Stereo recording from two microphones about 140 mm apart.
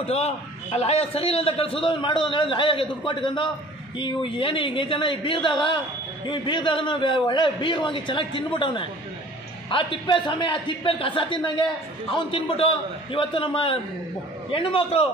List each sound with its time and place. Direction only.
0.0 s a man's voice: 50° left (ahead or behind)